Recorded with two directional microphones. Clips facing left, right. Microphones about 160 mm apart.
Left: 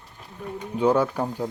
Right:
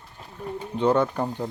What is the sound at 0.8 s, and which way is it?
Speech, 10° left (ahead or behind).